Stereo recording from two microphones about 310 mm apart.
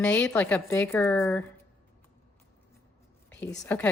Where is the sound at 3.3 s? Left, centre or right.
Centre.